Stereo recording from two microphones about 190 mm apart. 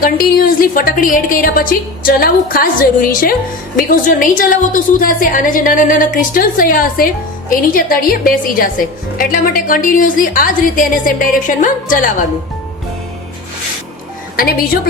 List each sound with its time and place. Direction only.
0.0 s a woman's voice: 50° left (ahead or behind)
14.3 s a woman's voice: 50° left (ahead or behind)